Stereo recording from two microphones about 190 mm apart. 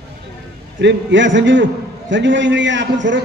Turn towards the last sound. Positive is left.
turn(degrees=-70)  # may be behind; listen again after turning